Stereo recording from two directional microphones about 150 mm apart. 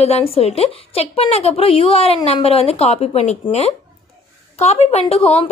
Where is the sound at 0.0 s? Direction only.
40° left (ahead or behind).